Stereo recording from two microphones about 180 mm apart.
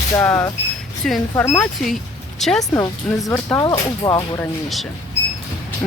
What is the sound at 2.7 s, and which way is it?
Speech, 15° left (ahead or behind).